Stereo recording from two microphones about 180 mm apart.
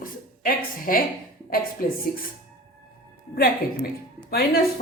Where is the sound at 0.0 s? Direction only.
50° left (ahead or behind).